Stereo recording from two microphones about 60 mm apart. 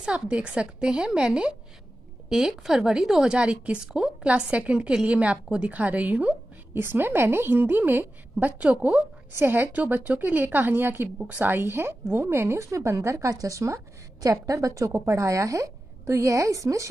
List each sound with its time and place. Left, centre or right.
0.0 s a woman's voice: centre
6.7 s a woman's voice: right
9.3 s a woman's voice: right